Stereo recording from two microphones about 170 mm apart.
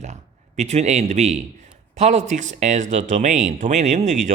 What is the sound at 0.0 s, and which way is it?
A man's voice, 45° right (ahead or behind).